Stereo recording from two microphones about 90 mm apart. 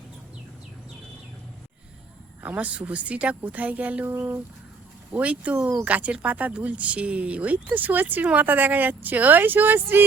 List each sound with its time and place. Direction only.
2.4 s speech: 15° right (ahead or behind)
5.1 s speech: 15° right (ahead or behind)